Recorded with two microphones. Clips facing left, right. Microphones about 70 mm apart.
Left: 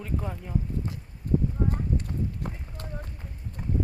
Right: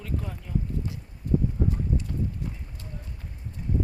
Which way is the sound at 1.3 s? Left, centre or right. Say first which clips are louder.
Even; left.